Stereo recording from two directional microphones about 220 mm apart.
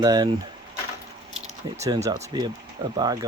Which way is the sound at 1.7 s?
15° right (ahead or behind).